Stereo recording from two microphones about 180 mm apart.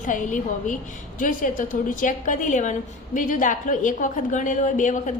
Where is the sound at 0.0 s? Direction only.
45° left (ahead or behind).